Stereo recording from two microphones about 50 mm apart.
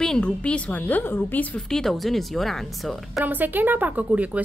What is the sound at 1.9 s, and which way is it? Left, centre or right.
Speech, centre.